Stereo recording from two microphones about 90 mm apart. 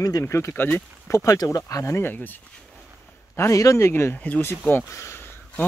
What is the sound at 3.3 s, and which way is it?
Speech, 35° left (ahead or behind).